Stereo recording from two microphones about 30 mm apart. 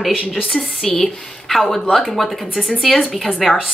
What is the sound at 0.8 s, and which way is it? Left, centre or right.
A woman's voice, centre.